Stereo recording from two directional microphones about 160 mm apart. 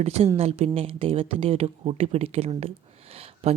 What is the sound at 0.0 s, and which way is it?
Speech, 40° right (ahead or behind).